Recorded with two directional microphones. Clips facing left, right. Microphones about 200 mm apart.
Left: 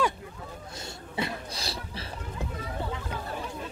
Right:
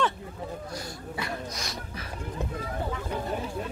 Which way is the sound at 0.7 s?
25° left (ahead or behind).